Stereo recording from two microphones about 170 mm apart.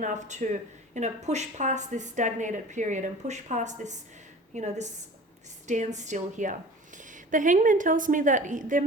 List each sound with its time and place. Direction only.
0.0 s a woman's voice: 45° right (ahead or behind)